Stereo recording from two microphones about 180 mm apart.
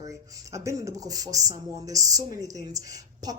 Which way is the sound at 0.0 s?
20° right (ahead or behind).